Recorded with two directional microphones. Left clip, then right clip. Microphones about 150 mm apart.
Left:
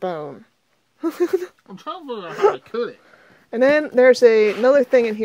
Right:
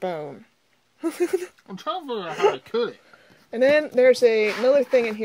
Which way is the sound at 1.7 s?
35° right (ahead or behind).